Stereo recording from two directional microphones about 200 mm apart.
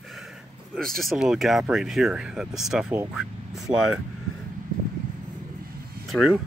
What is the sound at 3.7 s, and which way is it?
Speech, 30° right (ahead or behind).